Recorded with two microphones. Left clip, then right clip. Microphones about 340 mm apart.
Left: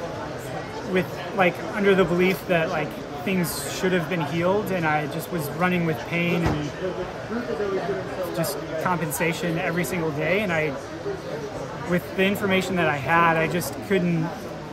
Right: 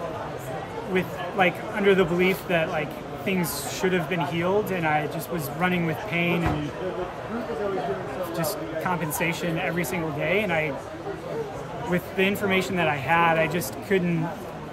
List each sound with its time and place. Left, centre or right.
0.9 s speech: centre
8.4 s speech: centre
11.9 s speech: centre